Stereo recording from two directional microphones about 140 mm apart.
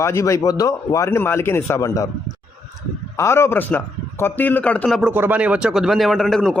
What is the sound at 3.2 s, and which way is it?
A man's voice, 20° left (ahead or behind).